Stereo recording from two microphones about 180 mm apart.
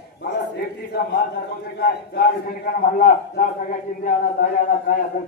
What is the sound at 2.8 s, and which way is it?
Speech, 45° left (ahead or behind).